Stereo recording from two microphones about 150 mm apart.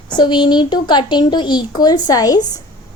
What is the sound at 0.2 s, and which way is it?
Speech, 30° left (ahead or behind).